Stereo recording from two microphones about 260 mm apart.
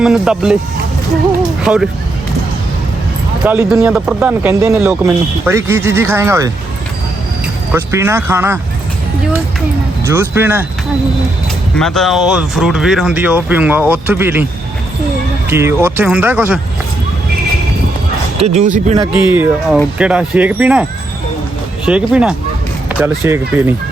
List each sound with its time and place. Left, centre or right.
0.0 s speech: centre
3.4 s speech: centre
7.7 s speech: centre
10.1 s speech: centre
11.8 s speech: centre
15.4 s speech: centre
18.3 s speech: right
19.3 s speech: centre
21.8 s speech: centre